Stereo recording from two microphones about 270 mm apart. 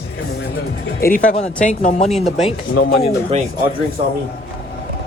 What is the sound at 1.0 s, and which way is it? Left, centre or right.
Speech, left.